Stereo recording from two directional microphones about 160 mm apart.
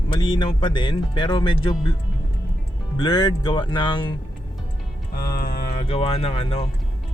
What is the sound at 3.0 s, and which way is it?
Speech, 25° left (ahead or behind).